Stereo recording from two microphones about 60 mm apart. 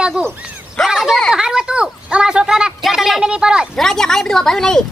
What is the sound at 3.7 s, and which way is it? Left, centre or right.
Speech, centre.